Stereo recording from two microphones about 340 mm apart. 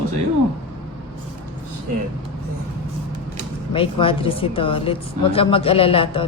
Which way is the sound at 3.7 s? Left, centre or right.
Centre.